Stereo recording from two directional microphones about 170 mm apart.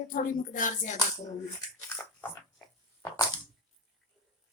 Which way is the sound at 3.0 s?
15° left (ahead or behind).